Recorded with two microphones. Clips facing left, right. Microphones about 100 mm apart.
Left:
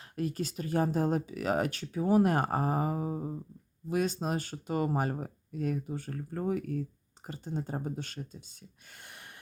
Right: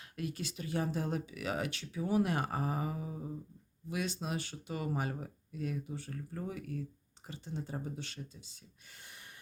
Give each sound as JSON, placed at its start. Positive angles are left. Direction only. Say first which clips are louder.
{"t": 0.2, "sound": "speech", "louder": "left 6 dB", "side_deg": 40}